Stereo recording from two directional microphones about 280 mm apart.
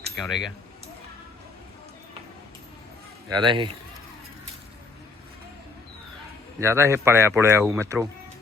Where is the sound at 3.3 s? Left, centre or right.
Centre.